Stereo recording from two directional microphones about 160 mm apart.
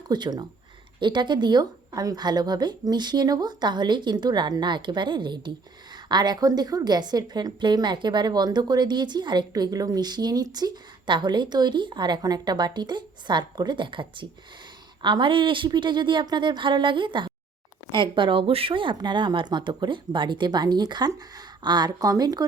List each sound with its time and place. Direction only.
0.1 s a woman's voice: 25° right (ahead or behind)